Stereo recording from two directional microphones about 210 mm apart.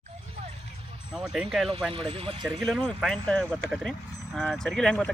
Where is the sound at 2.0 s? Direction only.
25° right (ahead or behind).